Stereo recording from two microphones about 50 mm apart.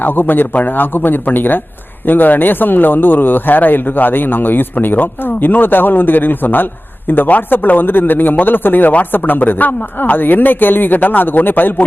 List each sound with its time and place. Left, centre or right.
0.0 s speech: left